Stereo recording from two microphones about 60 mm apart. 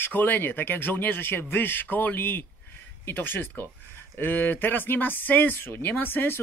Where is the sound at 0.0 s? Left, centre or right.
Left.